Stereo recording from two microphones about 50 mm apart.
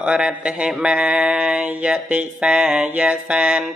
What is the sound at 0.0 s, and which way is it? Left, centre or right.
Mantra, right.